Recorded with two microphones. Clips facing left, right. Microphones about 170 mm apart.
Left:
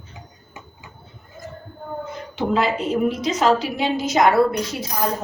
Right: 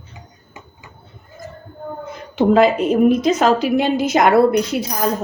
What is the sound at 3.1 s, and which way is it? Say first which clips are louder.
A woman's voice: right 4 dB; 50° right (ahead or behind).